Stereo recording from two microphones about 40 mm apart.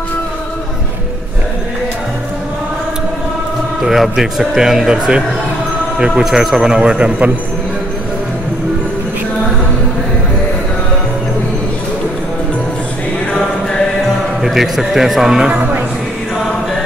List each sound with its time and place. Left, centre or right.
3.8 s speech: centre
4.6 s a man's voice: centre; by 7.3 s right
13.4 s music: centre
14.4 s a man's voice: centre
15.5 s music: right